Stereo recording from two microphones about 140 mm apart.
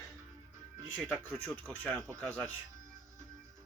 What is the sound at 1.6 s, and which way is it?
Speech, 10° left (ahead or behind).